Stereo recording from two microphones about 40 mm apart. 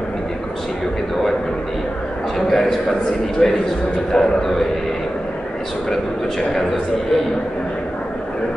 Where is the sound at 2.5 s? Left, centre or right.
Centre.